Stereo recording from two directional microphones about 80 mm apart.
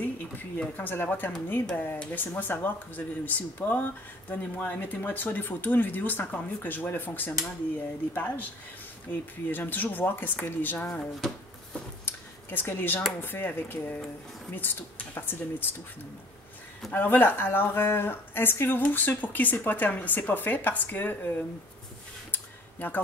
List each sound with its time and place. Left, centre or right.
0.0 s a woman's voice: left
10.9 s speech: centre
12.0 s a sound: left
13.2 s a woman's voice: left
16.9 s a woman's voice: left
22.3 s a sound: left